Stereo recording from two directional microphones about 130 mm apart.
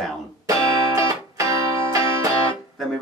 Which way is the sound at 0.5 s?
25° right (ahead or behind).